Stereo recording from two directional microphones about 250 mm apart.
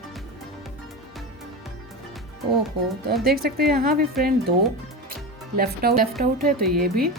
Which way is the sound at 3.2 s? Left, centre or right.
Right.